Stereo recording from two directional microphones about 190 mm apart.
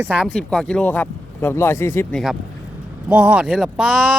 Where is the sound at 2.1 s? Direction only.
Centre (ahead or behind).